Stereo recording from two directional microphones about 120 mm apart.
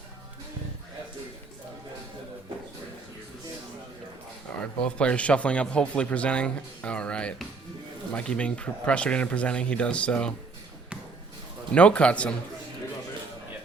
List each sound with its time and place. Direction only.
4.8 s a man's voice: 10° left (ahead or behind)
11.7 s a man's voice: 10° left (ahead or behind)